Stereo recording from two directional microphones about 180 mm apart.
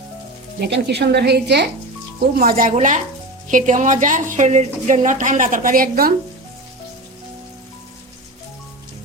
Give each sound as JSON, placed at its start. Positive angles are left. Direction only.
{"t": 0.6, "sound": "a woman's voice", "side_deg": -70}
{"t": 2.4, "sound": "a woman's voice", "side_deg": -50}